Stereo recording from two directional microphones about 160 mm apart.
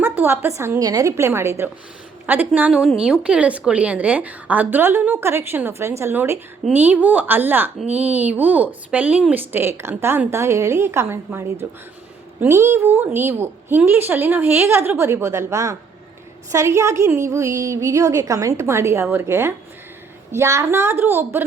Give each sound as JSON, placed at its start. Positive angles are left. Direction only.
{"t": 0.0, "sound": "a woman's voice", "side_deg": -15}